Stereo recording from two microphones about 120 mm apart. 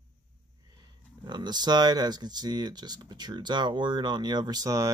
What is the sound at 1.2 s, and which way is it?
Speech, 35° right (ahead or behind).